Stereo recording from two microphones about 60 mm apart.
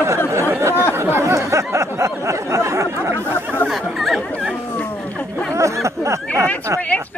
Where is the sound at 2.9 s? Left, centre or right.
Right.